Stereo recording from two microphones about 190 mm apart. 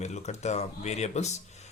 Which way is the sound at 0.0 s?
35° left (ahead or behind).